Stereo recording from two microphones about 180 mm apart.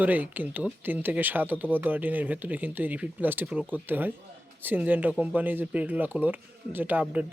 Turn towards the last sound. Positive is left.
turn(degrees=-5)  # may be behind; listen again after turning